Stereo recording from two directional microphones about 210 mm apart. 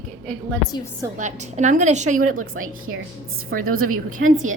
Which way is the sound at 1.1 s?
35° right (ahead or behind).